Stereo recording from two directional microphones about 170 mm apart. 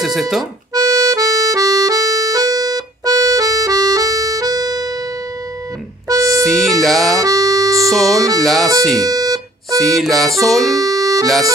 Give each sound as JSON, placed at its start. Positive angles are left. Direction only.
{"t": 0.0, "sound": "music", "side_deg": 0}
{"t": 0.7, "sound": "music", "side_deg": -20}
{"t": 6.0, "sound": "keyboard", "side_deg": -20}
{"t": 6.4, "sound": "music", "side_deg": 0}
{"t": 7.2, "sound": "music", "side_deg": -20}
{"t": 7.7, "sound": "speech", "side_deg": 0}
{"t": 8.4, "sound": "music", "side_deg": 0}
{"t": 9.0, "sound": "music", "side_deg": -20}
{"t": 9.8, "sound": "music", "side_deg": 0}
{"t": 10.8, "sound": "music", "side_deg": -20}